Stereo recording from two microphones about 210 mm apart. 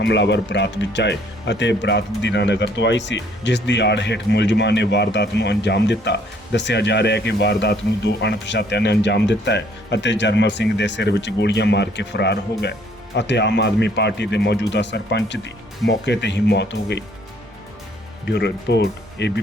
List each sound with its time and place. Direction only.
0.0 s speech: 55° left (ahead or behind)
18.3 s speech: 55° left (ahead or behind)